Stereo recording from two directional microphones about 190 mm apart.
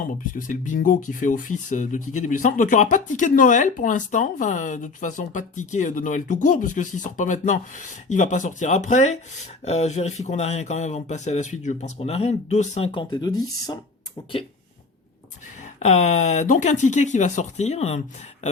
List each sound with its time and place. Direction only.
0.2 s speech: 45° left (ahead or behind); by 13.7 s 20° left (ahead or behind)
15.8 s speech: 35° left (ahead or behind)